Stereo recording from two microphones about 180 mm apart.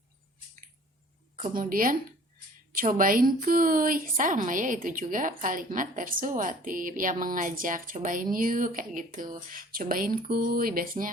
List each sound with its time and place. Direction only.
1.4 s a woman's voice: 45° right (ahead or behind)